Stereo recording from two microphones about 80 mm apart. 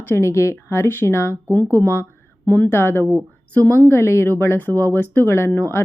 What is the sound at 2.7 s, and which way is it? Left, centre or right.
Speech, left.